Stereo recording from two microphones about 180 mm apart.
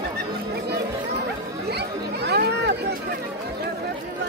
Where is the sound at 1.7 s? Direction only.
65° right (ahead or behind).